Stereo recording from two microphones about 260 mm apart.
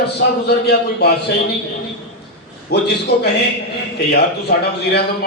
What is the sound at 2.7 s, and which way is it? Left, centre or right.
A man's voice, left.